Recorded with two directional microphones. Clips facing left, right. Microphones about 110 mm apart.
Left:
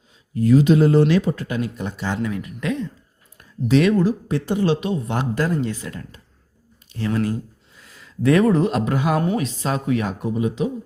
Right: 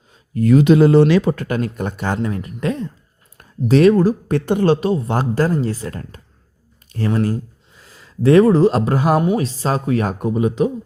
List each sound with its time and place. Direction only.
0.1 s speech: 60° right (ahead or behind); by 4.1 s 40° right (ahead or behind)
4.3 s speech: 55° right (ahead or behind)